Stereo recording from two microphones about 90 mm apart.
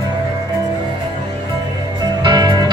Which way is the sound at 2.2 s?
50° right (ahead or behind).